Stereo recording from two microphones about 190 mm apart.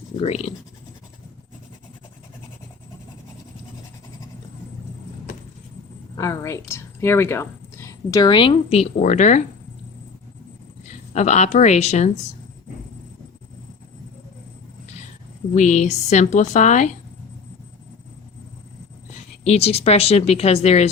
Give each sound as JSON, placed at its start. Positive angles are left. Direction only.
{"t": 0.2, "sound": "speech", "side_deg": 35}
{"t": 6.1, "sound": "speech", "side_deg": 15}
{"t": 11.1, "sound": "speech", "side_deg": 40}
{"t": 15.5, "sound": "speech", "side_deg": 40}
{"t": 19.5, "sound": "speech", "side_deg": 35}